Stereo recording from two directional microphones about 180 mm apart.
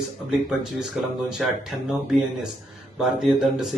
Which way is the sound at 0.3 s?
5° right (ahead or behind).